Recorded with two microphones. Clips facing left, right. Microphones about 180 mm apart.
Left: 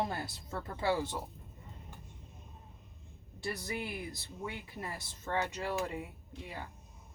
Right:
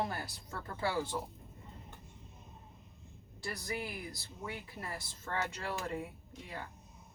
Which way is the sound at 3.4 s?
20° left (ahead or behind).